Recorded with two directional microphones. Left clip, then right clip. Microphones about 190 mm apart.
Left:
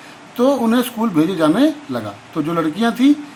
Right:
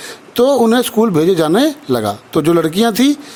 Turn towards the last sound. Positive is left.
turn(degrees=-50)  # may be behind; listen again after turning